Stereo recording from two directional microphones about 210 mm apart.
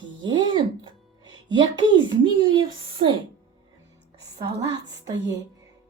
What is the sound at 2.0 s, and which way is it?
A child's voice, 25° right (ahead or behind).